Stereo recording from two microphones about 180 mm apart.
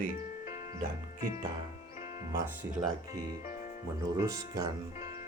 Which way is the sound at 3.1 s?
20° right (ahead or behind).